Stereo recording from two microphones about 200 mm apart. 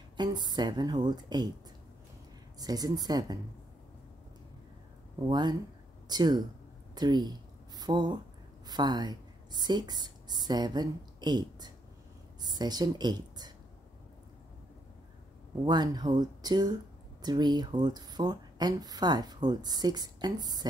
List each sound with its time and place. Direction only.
0.2 s speech: 20° right (ahead or behind)
2.6 s speech: 20° right (ahead or behind)
5.3 s a woman's voice: 20° right (ahead or behind)
15.6 s speech: 20° right (ahead or behind)